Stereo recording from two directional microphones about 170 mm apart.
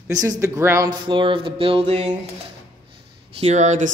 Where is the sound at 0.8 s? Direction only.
30° right (ahead or behind).